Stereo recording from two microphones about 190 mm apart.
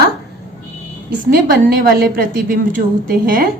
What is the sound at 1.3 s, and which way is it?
A woman's voice, 50° right (ahead or behind).